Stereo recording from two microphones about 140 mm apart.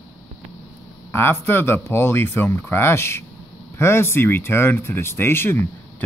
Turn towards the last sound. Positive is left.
turn(degrees=15)  # may be behind; listen again after turning